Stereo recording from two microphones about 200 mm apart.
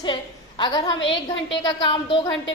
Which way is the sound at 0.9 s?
65° left (ahead or behind).